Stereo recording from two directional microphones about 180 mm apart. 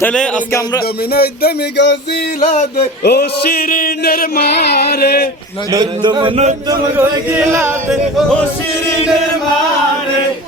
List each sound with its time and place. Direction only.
0.0 s music: 5° left (ahead or behind)
1.1 s music: 60° left (ahead or behind)
2.5 s music: 35° left (ahead or behind)
3.0 s music: 60° left (ahead or behind)
5.7 s speech: 25° right (ahead or behind)
6.9 s chant: 10° right (ahead or behind)